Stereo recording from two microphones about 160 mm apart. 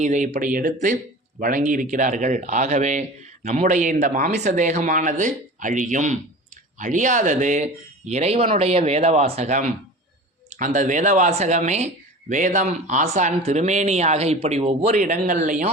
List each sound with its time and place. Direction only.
0.0 s speech: 50° right (ahead or behind)